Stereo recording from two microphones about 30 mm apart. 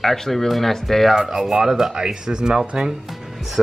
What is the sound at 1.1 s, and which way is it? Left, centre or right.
Speech, right.